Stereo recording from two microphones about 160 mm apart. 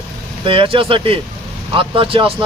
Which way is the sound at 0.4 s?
35° right (ahead or behind).